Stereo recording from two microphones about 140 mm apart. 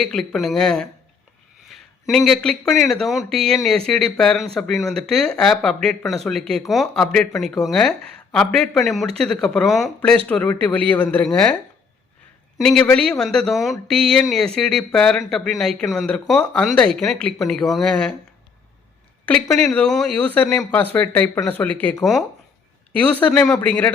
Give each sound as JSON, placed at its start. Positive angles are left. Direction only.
{"t": 0.0, "sound": "speech", "side_deg": 0}
{"t": 12.5, "sound": "speech", "side_deg": 5}
{"t": 19.3, "sound": "speech", "side_deg": 10}